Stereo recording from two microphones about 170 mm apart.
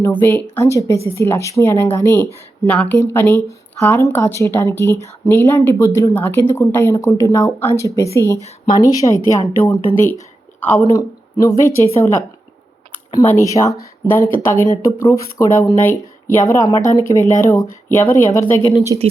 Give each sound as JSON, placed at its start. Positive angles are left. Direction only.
{"t": 0.0, "sound": "speech", "side_deg": 15}
{"t": 18.9, "sound": "speech", "side_deg": -25}